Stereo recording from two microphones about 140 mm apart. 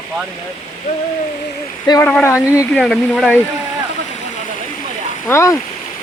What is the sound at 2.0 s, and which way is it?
Speech, 5° left (ahead or behind).